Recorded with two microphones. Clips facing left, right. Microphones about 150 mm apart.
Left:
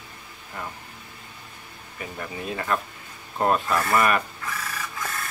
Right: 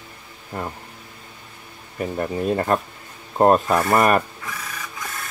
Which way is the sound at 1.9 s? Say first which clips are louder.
Right 10 dB; 45° right (ahead or behind).